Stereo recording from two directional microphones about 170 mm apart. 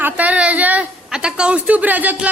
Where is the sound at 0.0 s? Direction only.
10° right (ahead or behind).